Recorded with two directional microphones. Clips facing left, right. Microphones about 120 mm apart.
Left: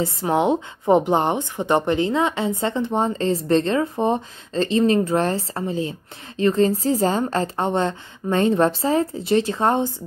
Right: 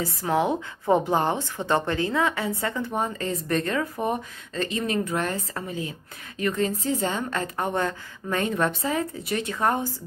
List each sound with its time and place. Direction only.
0.0 s speech: 25° left (ahead or behind)